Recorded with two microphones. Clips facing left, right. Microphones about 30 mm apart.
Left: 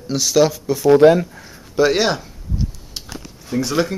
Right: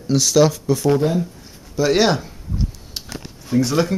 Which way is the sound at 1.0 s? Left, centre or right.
Left.